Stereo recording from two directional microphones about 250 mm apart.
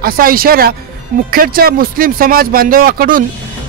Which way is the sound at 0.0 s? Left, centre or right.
Right.